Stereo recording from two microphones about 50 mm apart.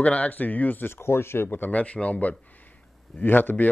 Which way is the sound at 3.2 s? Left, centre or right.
Left.